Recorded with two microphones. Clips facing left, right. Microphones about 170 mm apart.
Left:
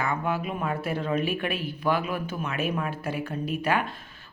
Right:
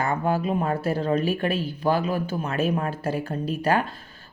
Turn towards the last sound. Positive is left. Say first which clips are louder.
# right 3 dB
turn(degrees=-35)  # may be behind; listen again after turning